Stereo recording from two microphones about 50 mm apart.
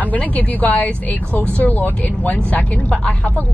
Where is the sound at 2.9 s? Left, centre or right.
Centre.